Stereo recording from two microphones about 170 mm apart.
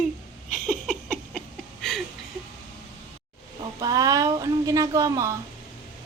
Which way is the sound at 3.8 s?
20° right (ahead or behind).